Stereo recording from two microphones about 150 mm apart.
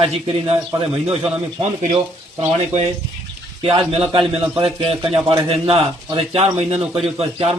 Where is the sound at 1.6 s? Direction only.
45° right (ahead or behind).